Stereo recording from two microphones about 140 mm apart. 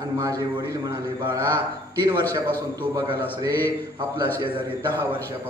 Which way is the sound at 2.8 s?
35° right (ahead or behind).